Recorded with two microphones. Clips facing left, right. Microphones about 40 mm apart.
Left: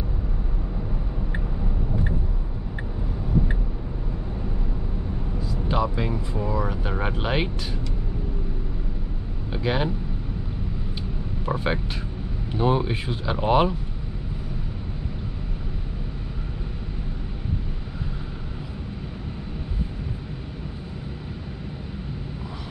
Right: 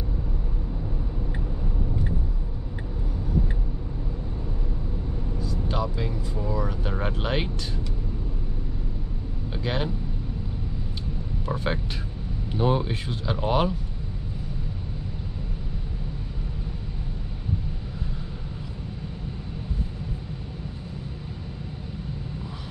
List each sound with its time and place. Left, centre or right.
5.4 s vehicle: centre
6.5 s speech: centre
9.5 s speech: centre
11.4 s speech: centre